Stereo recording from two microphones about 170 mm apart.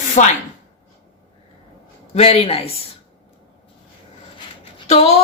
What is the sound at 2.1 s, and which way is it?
Speech, 35° left (ahead or behind).